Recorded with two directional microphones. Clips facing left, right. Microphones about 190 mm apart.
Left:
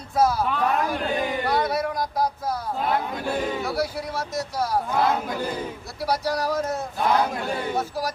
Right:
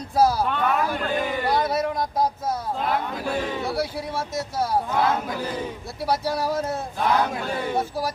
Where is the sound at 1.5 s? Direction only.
25° right (ahead or behind).